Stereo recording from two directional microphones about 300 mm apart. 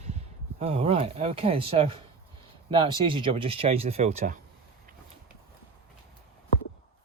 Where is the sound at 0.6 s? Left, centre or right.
Centre.